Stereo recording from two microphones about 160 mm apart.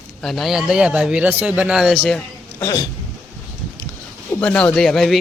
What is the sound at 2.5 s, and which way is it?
Speech, 20° left (ahead or behind).